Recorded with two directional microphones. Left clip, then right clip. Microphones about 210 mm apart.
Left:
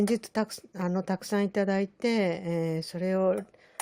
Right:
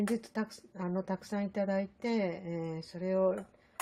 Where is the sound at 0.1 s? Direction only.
50° left (ahead or behind).